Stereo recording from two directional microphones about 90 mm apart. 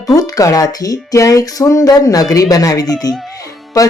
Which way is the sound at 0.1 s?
40° left (ahead or behind).